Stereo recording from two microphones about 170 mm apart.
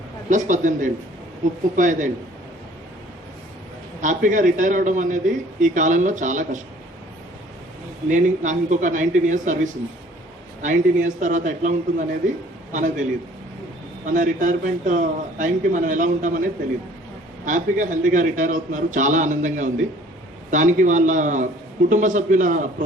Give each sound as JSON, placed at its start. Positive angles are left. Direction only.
{"t": 0.3, "sound": "a man's voice", "side_deg": -50}
{"t": 4.0, "sound": "a man's voice", "side_deg": -50}
{"t": 8.1, "sound": "a man's voice", "side_deg": -45}
{"t": 17.4, "sound": "a man's voice", "side_deg": -50}